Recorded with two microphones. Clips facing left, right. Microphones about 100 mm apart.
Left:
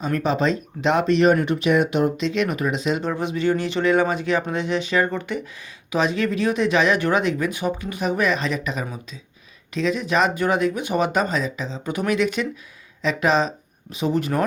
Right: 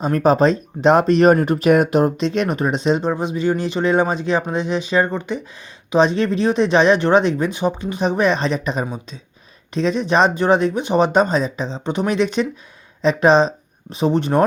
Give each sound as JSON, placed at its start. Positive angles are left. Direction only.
{"t": 0.0, "sound": "speech", "side_deg": -40}
{"t": 3.0, "sound": "speech", "side_deg": -20}